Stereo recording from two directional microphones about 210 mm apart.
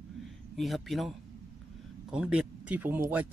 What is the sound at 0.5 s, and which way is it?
Speech, centre (ahead or behind).